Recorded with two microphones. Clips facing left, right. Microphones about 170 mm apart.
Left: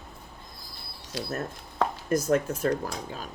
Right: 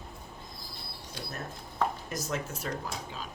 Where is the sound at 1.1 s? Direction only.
90° left.